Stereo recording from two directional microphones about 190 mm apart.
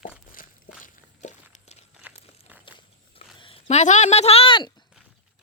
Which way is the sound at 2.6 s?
25° left (ahead or behind).